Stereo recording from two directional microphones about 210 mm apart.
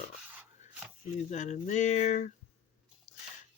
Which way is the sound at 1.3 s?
35° left (ahead or behind).